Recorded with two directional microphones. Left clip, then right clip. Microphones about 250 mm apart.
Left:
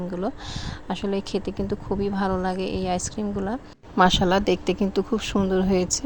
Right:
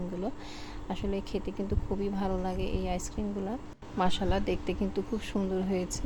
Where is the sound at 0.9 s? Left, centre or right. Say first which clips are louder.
Left 8 dB; centre.